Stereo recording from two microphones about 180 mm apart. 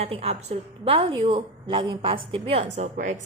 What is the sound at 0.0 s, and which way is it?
A woman's voice, 35° right (ahead or behind).